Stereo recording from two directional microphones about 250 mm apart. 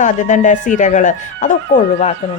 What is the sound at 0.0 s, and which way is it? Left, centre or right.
Speech, left.